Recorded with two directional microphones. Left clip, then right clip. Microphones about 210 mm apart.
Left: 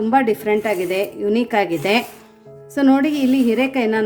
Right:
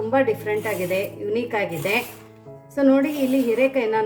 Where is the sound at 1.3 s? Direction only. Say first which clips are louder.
Left 6 dB; 50° left (ahead or behind).